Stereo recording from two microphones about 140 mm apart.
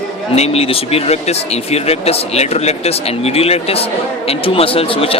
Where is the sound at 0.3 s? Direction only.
45° left (ahead or behind).